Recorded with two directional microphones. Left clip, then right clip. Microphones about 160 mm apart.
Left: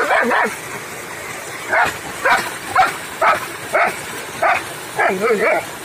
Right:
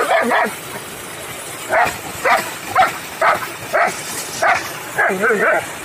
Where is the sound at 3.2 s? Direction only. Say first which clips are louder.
Even; 5° right (ahead or behind).